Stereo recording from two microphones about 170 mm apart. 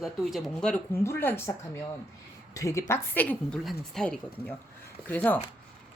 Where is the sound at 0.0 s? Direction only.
Centre (ahead or behind).